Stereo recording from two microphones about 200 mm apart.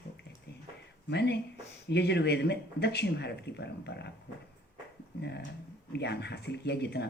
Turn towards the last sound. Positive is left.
turn(degrees=55)  # may be behind; listen again after turning